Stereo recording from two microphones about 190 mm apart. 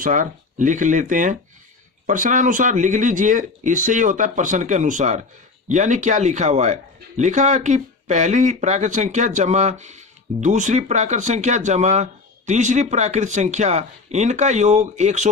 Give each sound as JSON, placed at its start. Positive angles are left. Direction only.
{"t": 0.0, "sound": "speech", "side_deg": -45}